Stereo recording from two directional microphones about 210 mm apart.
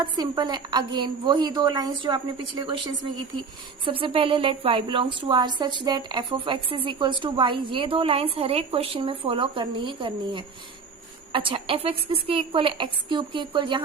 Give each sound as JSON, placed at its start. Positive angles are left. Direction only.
{"t": 0.0, "sound": "a woman's voice", "side_deg": -20}